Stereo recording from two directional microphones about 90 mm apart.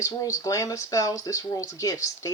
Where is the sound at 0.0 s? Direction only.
40° left (ahead or behind).